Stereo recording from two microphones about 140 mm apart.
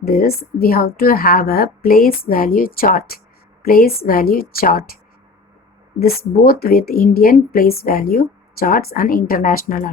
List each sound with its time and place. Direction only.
0.0 s speech: 90° left
6.0 s speech: 90° left